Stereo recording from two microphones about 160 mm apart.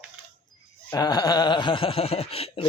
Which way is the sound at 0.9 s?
25° left (ahead or behind).